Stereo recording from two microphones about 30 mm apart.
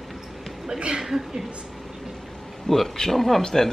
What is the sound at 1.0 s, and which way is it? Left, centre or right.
Speech, centre.